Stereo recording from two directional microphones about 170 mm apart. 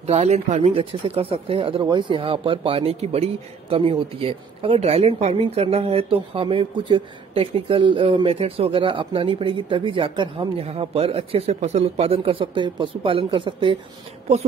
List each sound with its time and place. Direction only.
0.0 s speech: 40° right (ahead or behind)